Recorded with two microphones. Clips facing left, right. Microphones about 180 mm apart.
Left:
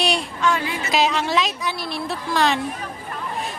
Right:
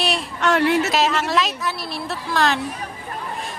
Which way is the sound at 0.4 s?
70° right (ahead or behind).